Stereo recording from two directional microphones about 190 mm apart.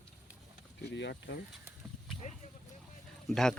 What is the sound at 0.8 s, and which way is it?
Speech, 65° left (ahead or behind).